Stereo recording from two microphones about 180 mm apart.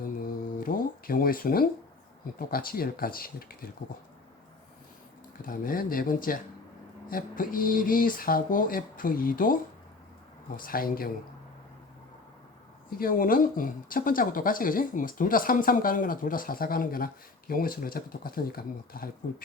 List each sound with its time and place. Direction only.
0.0 s a sound: 50° left (ahead or behind)
2.2 s speech: 55° left (ahead or behind)
5.5 s speech: 50° left (ahead or behind)
10.6 s speech: 55° left (ahead or behind)
12.9 s speech: 55° left (ahead or behind)